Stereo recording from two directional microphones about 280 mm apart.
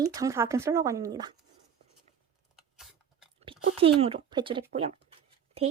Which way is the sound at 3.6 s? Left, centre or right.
Right.